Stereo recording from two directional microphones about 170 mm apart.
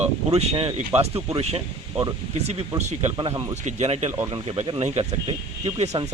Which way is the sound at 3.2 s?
30° right (ahead or behind).